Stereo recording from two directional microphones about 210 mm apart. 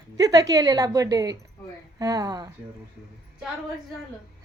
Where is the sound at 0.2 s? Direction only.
15° right (ahead or behind).